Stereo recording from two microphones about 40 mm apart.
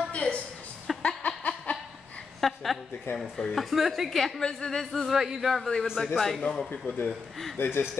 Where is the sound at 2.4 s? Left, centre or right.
Centre.